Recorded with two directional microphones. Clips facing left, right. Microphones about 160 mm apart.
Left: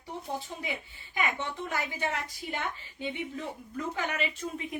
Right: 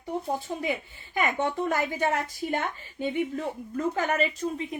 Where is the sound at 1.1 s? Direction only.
50° right (ahead or behind).